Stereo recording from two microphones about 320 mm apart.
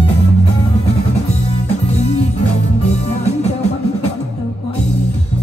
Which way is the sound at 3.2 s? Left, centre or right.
Left.